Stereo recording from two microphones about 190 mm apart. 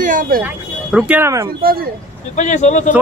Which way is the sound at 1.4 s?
50° right (ahead or behind).